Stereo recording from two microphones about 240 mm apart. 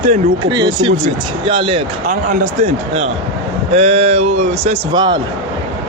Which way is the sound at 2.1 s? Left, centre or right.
Right.